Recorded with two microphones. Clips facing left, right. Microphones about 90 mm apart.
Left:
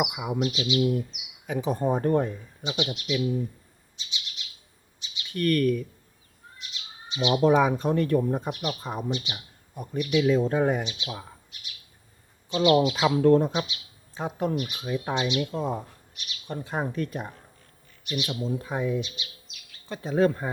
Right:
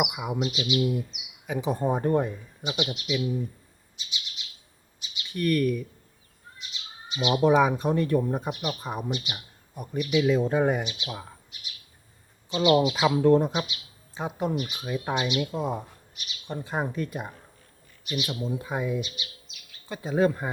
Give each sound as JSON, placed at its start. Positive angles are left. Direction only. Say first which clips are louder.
{"t": 0.0, "sound": "speech", "louder": "left 1 dB", "side_deg": -10}
{"t": 4.9, "sound": "chirp", "louder": "left 1 dB", "side_deg": -15}
{"t": 7.4, "sound": "speech", "louder": "even", "side_deg": -10}
{"t": 8.1, "sound": "speech", "louder": "left 1 dB", "side_deg": -5}
{"t": 10.2, "sound": "speech", "louder": "even", "side_deg": -15}
{"t": 12.5, "sound": "speech", "louder": "left 1 dB", "side_deg": -15}
{"t": 12.8, "sound": "speech", "louder": "even", "side_deg": -5}
{"t": 14.5, "sound": "speech", "louder": "left 1 dB", "side_deg": 0}
{"t": 16.6, "sound": "speech", "louder": "even", "side_deg": -15}
{"t": 18.0, "sound": "speech", "louder": "left 1 dB", "side_deg": -5}